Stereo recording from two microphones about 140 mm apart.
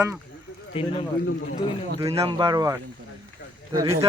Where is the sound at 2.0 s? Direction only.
25° right (ahead or behind).